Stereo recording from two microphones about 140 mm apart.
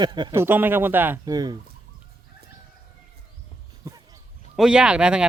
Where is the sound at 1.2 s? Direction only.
30° right (ahead or behind).